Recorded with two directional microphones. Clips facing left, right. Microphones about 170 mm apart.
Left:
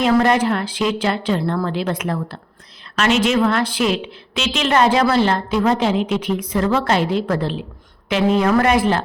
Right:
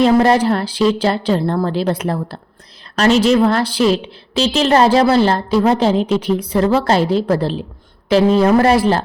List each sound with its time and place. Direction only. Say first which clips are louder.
0.0 s a woman's voice: right 4 dB; 35° right (ahead or behind)